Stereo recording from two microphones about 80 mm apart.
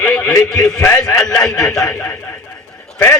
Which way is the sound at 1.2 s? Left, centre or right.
Centre.